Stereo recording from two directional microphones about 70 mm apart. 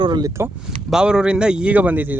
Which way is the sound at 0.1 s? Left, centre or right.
Right.